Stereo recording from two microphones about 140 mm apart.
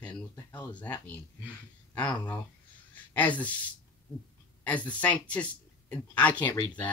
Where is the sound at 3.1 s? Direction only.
10° left (ahead or behind).